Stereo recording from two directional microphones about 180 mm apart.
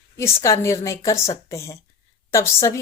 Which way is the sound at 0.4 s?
15° left (ahead or behind).